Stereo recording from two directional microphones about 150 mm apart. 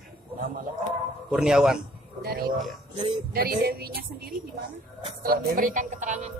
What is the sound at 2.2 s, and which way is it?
A woman's voice, 90° right.